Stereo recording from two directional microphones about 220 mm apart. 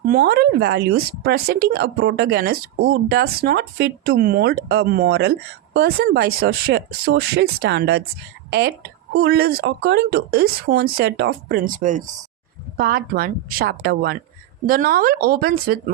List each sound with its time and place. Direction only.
0.0 s speech: 40° right (ahead or behind)